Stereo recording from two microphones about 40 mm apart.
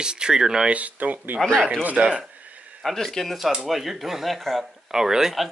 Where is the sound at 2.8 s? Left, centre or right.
Centre.